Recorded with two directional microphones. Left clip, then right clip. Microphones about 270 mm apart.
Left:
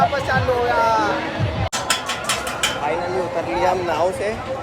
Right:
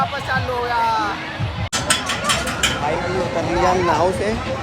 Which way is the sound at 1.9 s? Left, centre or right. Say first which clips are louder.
Right 4 dB; left.